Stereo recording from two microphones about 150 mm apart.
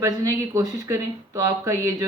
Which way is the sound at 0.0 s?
25° right (ahead or behind).